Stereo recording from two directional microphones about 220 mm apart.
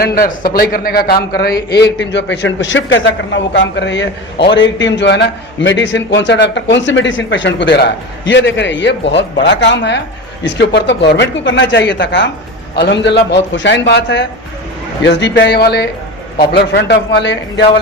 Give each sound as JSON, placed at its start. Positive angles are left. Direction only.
{"t": 0.0, "sound": "a man's voice", "side_deg": 40}